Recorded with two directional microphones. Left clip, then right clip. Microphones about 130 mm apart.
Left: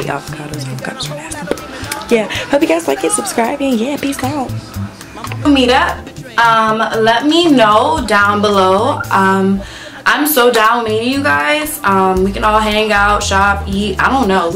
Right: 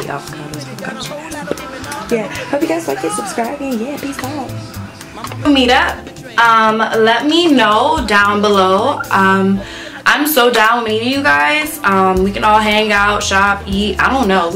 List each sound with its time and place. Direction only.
2.0 s speech: 25° left (ahead or behind)
2.8 s a woman's voice: centre (ahead or behind)
5.4 s a woman's voice: centre (ahead or behind)